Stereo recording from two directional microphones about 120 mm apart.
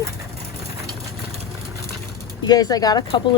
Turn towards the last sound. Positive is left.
turn(degrees=40)  # may be behind; listen again after turning